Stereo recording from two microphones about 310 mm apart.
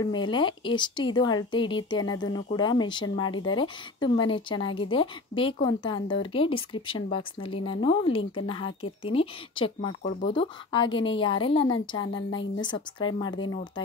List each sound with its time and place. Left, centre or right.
0.0 s speech: centre
12.0 s a woman's voice: left
12.3 s speech: centre